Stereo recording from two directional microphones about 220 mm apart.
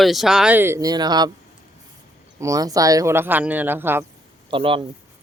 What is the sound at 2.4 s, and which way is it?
Speech, 15° right (ahead or behind).